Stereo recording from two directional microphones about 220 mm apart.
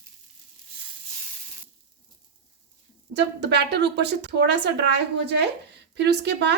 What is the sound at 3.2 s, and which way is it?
A woman's voice, 50° right (ahead or behind).